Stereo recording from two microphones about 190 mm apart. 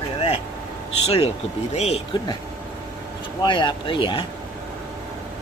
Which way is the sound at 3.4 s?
25° left (ahead or behind).